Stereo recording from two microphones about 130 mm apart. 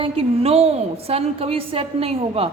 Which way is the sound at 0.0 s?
50° right (ahead or behind).